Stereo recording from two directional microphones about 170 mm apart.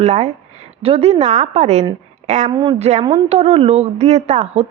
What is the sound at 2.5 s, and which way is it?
Speech, 25° right (ahead or behind).